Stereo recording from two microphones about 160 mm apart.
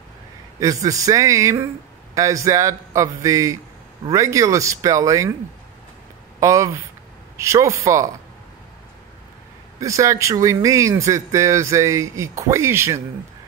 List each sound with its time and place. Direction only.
0.6 s speech: 20° right (ahead or behind)
6.4 s speech: 20° right (ahead or behind)
9.8 s speech: 20° right (ahead or behind)